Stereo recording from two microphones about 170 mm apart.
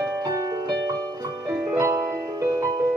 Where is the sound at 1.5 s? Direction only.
15° right (ahead or behind).